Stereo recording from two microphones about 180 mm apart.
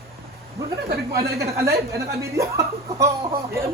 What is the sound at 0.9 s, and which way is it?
Speech, 60° right (ahead or behind).